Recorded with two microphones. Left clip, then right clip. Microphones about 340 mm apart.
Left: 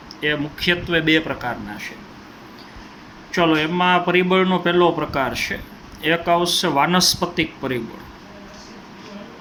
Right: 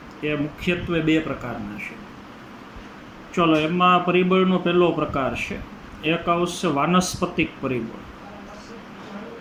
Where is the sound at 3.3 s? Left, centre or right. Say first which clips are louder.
Left 2 dB; left.